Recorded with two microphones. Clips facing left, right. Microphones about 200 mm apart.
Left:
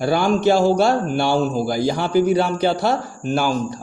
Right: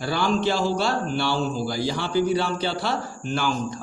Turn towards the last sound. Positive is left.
turn(degrees=45)  # may be behind; listen again after turning